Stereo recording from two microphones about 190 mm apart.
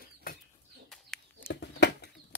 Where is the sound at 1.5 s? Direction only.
65° left (ahead or behind).